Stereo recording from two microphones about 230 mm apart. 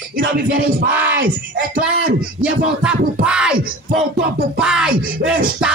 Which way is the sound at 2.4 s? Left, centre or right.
Centre.